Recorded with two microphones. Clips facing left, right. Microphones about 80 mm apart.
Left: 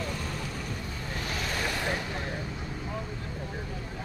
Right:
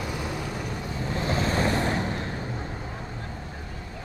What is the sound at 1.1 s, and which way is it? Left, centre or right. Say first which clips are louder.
Vehicle: right 8 dB; right.